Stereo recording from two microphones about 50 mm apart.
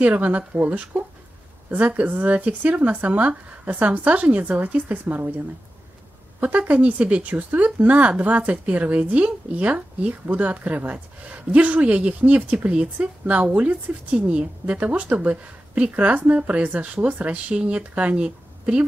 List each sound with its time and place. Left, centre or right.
0.0 s a woman's voice: right
6.4 s a woman's voice: right